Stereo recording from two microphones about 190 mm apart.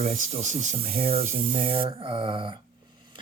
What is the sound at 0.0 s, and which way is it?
Speech, 40° right (ahead or behind).